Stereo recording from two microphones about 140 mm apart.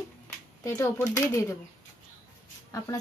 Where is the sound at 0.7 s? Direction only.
15° left (ahead or behind).